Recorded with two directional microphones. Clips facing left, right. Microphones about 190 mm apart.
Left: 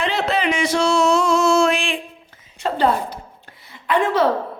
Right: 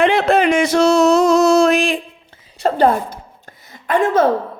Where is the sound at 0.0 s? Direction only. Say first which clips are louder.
Right 7 dB; 55° right (ahead or behind).